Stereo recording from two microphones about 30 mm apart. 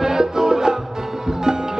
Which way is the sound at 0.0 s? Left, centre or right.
Centre.